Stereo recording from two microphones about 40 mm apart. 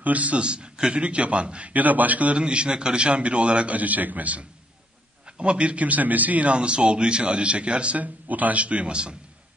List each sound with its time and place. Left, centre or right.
0.0 s a man's voice: right
1.7 s a man's voice: right
2.3 s a man's voice: right
3.7 s a man's voice: right
5.2 s a man's voice: right
6.5 s a man's voice: right